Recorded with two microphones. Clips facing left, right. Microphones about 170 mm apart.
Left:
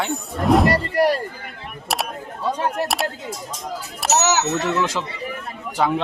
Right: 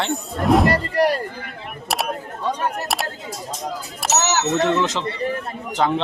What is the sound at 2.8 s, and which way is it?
Speech, centre (ahead or behind).